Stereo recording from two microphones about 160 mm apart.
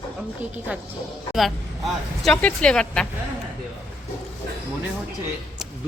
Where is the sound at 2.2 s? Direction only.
5° left (ahead or behind).